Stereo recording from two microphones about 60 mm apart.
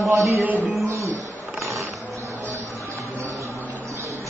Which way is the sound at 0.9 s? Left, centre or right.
Right.